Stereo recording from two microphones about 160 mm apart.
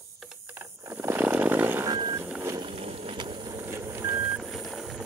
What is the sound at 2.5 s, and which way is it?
Vehicle, 35° right (ahead or behind).